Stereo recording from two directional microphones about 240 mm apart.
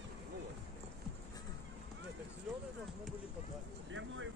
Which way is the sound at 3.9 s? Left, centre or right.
Right.